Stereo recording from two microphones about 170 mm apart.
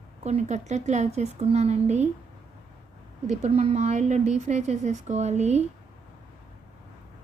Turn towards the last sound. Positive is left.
turn(degrees=-40)  # may be behind; listen again after turning